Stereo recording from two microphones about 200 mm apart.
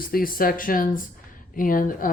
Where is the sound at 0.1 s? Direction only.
45° left (ahead or behind).